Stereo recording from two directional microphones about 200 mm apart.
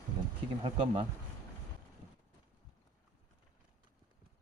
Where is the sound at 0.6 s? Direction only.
30° right (ahead or behind).